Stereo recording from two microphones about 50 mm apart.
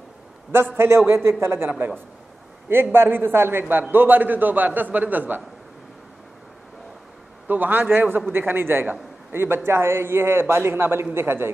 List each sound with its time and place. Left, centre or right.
0.7 s a man's voice: right
2.7 s a man's voice: right
7.4 s a man's voice: right